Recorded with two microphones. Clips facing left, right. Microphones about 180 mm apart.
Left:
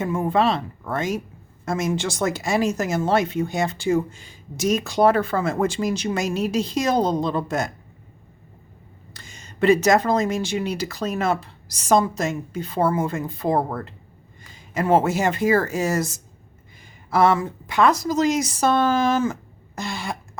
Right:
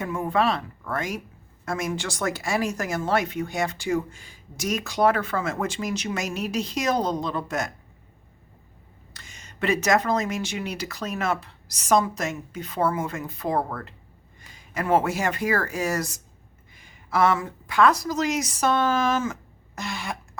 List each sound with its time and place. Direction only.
0.0 s speech: 25° left (ahead or behind)
9.1 s a woman's voice: 30° left (ahead or behind)